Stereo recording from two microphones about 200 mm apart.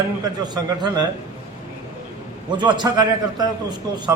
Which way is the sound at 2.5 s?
20° right (ahead or behind).